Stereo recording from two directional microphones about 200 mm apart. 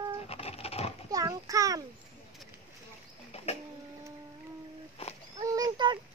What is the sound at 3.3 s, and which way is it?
Bird, 30° left (ahead or behind).